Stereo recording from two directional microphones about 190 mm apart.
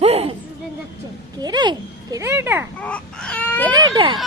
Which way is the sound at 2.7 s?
5° left (ahead or behind).